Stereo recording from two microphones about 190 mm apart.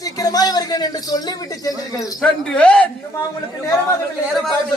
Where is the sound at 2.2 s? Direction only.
5° left (ahead or behind).